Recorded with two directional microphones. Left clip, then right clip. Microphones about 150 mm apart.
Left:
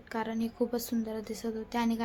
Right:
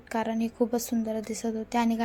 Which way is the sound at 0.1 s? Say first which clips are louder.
Right 5 dB; 20° right (ahead or behind).